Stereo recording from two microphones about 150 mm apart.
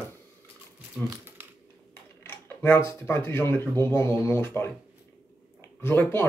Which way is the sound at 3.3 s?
15° left (ahead or behind).